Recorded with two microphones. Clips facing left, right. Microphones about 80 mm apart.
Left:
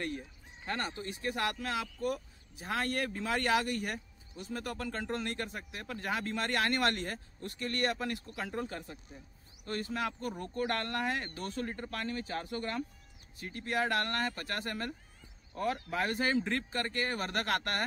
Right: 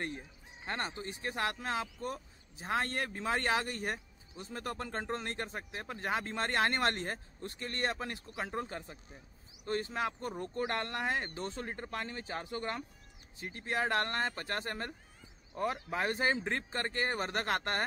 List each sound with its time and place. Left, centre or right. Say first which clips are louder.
0.7 s speech: left 1 dB; right